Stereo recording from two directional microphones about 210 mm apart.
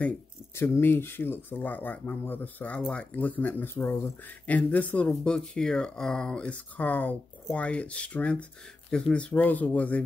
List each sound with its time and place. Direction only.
0.6 s speech: 10° left (ahead or behind)